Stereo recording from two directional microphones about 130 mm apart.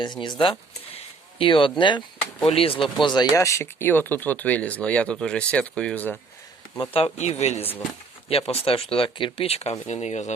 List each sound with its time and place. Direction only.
0.0 s speech: 35° left (ahead or behind)
0.9 s a sound: 40° left (ahead or behind)
1.8 s speech: 35° left (ahead or behind)
3.3 s speech: 25° left (ahead or behind)
6.9 s speech: 55° left (ahead or behind)
7.6 s speech: 15° left (ahead or behind)
8.3 s speech: 50° left (ahead or behind)